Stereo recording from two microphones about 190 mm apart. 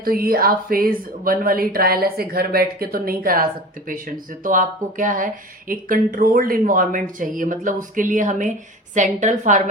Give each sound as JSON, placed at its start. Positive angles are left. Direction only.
{"t": 0.0, "sound": "a woman's voice", "side_deg": -50}